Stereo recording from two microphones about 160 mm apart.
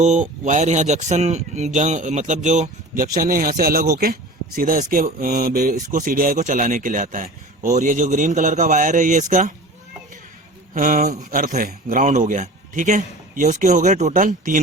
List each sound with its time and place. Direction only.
0.0 s speech: 50° right (ahead or behind)
10.8 s speech: 60° right (ahead or behind)